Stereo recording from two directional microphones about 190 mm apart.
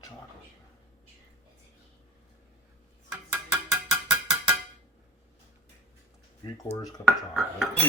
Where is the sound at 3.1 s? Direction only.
Centre (ahead or behind).